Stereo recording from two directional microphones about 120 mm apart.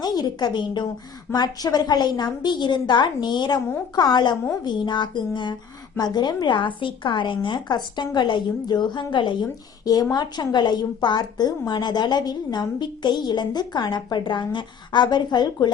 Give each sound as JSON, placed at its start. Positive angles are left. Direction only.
{"t": 0.0, "sound": "a woman's voice", "side_deg": 35}